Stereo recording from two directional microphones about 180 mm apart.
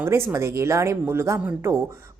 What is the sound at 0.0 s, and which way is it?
A woman's voice, 15° right (ahead or behind).